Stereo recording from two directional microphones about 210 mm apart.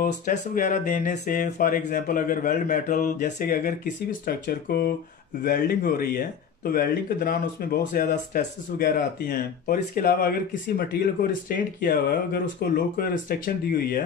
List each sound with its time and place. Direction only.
0.0 s speech: 40° left (ahead or behind)